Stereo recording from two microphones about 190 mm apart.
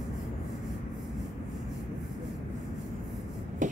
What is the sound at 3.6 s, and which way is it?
Beatboxing, 40° right (ahead or behind).